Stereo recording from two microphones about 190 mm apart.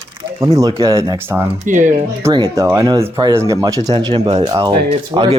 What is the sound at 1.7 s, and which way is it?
Speech, 45° right (ahead or behind).